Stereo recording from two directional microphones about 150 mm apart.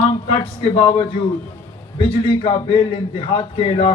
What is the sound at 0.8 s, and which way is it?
A man's voice, 35° left (ahead or behind).